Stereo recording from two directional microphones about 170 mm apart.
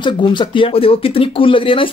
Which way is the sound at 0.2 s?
30° left (ahead or behind).